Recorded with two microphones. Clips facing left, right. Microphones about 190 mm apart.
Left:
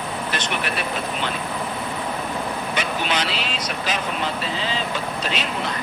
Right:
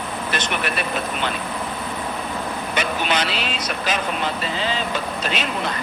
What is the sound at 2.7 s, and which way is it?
Vehicle, 55° right (ahead or behind).